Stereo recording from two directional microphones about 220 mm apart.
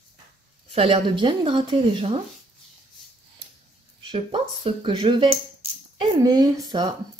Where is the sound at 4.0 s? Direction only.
25° right (ahead or behind).